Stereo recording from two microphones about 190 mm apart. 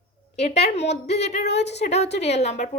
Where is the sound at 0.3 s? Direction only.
35° left (ahead or behind).